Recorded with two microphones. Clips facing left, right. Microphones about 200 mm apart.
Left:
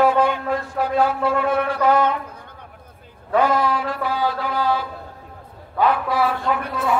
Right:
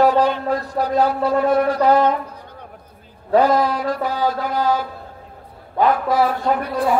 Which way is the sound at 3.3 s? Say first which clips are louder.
Right 3 dB; 40° right (ahead or behind).